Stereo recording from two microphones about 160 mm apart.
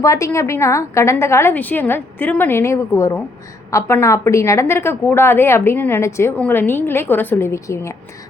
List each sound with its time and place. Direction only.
0.0 s a woman's voice: 20° left (ahead or behind)